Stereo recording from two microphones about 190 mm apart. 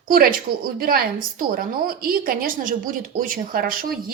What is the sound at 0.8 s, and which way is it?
A woman's voice, 50° right (ahead or behind).